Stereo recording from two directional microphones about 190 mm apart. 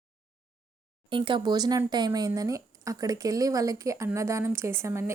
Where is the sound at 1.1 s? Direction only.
25° right (ahead or behind).